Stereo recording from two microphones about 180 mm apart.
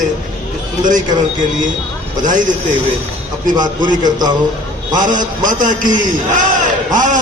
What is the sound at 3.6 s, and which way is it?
Speech, 25° right (ahead or behind).